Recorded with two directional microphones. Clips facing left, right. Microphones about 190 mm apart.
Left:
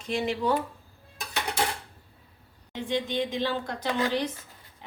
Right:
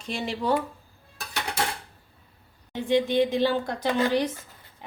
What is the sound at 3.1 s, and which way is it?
Speech, 35° right (ahead or behind).